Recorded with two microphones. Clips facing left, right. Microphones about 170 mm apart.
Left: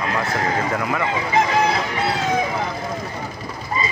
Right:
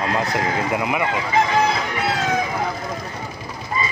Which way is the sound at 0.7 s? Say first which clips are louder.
Right 1 dB; 15° right (ahead or behind).